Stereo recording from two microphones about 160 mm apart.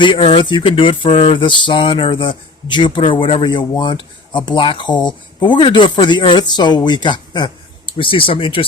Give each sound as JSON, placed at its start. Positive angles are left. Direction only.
{"t": 0.0, "sound": "speech", "side_deg": 30}